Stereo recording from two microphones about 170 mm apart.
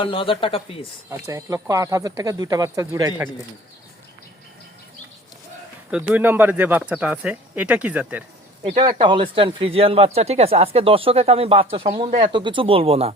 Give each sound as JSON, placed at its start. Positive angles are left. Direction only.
{"t": 0.0, "sound": "speech", "side_deg": 30}
{"t": 1.3, "sound": "speech", "side_deg": -15}
{"t": 5.9, "sound": "speech", "side_deg": -10}
{"t": 8.6, "sound": "speech", "side_deg": -30}